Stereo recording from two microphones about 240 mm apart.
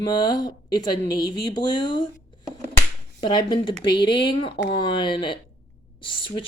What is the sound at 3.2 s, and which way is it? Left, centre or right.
Speech, centre.